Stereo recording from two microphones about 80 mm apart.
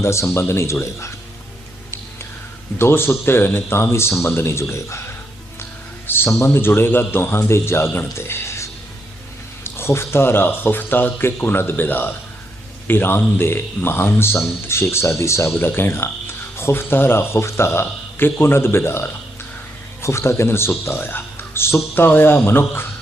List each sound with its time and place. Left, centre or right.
0.0 s speech: left
2.7 s speech: left